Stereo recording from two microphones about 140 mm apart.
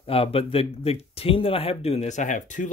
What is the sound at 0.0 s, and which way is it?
Speech, 45° left (ahead or behind).